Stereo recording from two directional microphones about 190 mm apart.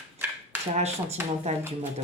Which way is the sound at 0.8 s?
35° right (ahead or behind).